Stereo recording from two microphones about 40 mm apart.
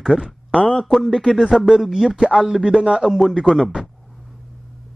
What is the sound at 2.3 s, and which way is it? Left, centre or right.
Speech, right.